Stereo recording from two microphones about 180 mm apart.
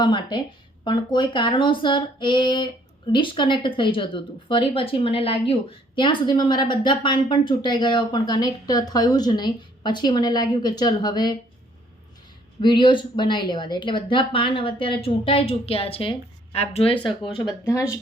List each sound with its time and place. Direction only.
0.0 s a woman's voice: 25° left (ahead or behind)
12.6 s a woman's voice: 25° left (ahead or behind)
17.7 s speech: 15° left (ahead or behind)